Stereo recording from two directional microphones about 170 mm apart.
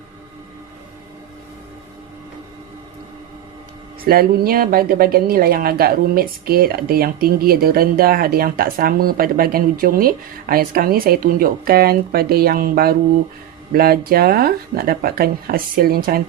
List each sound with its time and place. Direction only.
4.0 s speech: 60° right (ahead or behind)